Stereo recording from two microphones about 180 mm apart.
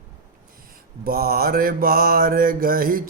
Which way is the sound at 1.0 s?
55° right (ahead or behind).